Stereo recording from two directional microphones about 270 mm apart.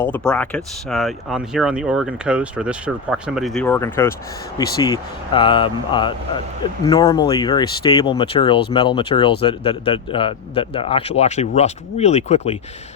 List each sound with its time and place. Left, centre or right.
0.0 s speech: centre; by 12.5 s left